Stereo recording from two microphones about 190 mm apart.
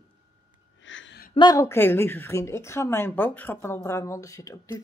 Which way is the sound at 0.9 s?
90° left.